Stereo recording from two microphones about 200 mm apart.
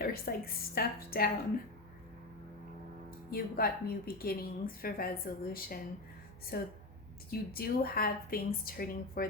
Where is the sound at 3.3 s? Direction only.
50° left (ahead or behind).